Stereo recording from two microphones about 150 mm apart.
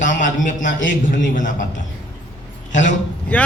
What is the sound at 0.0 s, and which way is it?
Speech, 60° left (ahead or behind).